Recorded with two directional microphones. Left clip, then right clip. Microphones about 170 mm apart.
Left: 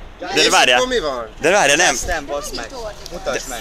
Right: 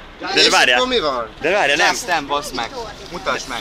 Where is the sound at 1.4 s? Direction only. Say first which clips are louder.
Left 2 dB; 40° left (ahead or behind).